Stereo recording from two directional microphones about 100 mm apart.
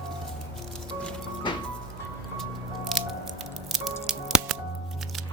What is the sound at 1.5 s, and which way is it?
Music, 55° left (ahead or behind).